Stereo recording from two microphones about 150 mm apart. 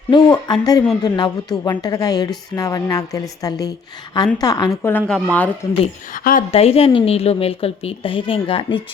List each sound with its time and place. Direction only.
0.1 s a woman's voice: 30° left (ahead or behind); by 5.5 s 5° left (ahead or behind)
6.1 s a woman's voice: 65° left (ahead or behind)
6.5 s a woman's voice: 40° left (ahead or behind)